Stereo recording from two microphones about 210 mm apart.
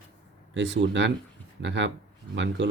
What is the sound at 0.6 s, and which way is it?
Speech, 60° right (ahead or behind).